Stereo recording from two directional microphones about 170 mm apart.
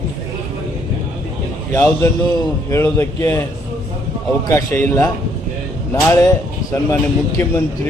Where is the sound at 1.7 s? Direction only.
15° left (ahead or behind).